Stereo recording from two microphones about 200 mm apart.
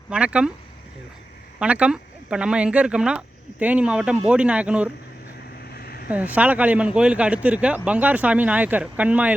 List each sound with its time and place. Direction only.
0.1 s speech: 5° right (ahead or behind)
1.5 s speech: 5° right (ahead or behind)
5.7 s a sound: 50° left (ahead or behind)
6.1 s speech: 10° right (ahead or behind)